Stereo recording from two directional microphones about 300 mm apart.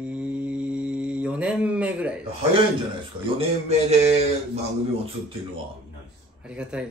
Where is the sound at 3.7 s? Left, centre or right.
Right.